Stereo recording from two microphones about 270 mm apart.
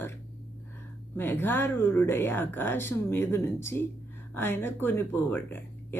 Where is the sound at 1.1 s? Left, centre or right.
Centre.